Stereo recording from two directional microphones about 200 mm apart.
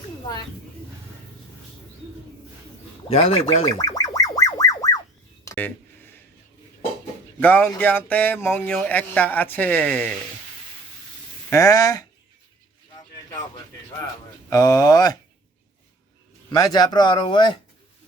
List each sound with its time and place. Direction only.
3.1 s speech: 30° left (ahead or behind)
3.8 s music: 20° left (ahead or behind)
5.5 s a sound: 10° left (ahead or behind)
7.3 s speech: 10° left (ahead or behind)
11.5 s speech: 20° left (ahead or behind)
14.5 s speech: 20° left (ahead or behind)
16.5 s speech: 20° left (ahead or behind)